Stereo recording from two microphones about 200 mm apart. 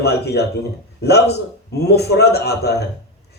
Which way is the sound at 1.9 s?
55° left (ahead or behind).